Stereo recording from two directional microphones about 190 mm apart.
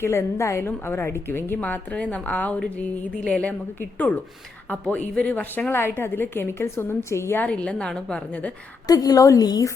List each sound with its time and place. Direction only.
0.0 s a woman's voice: 15° left (ahead or behind)
8.9 s a woman's voice: 20° left (ahead or behind)